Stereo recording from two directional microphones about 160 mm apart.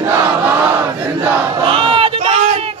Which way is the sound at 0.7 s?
15° right (ahead or behind).